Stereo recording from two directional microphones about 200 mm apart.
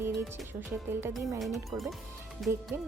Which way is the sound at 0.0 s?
10° right (ahead or behind).